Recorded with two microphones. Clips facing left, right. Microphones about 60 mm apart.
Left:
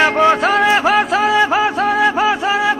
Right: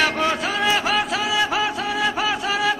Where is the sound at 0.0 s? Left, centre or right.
Left.